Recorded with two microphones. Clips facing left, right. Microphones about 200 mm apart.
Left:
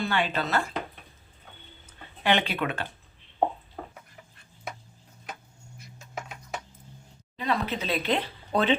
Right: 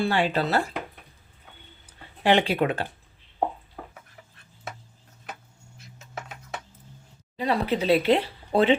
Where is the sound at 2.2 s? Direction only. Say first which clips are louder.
Right 5 dB; 35° right (ahead or behind).